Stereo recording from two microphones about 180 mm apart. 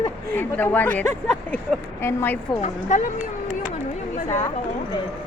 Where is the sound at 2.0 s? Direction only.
10° left (ahead or behind).